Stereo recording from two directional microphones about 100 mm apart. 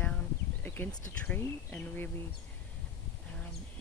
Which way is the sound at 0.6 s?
20° left (ahead or behind).